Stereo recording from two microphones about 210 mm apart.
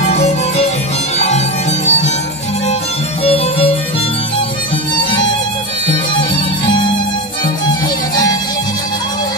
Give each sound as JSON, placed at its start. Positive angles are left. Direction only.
{"t": 0.1, "sound": "music", "side_deg": 30}
{"t": 1.9, "sound": "music", "side_deg": 35}
{"t": 3.3, "sound": "music", "side_deg": 30}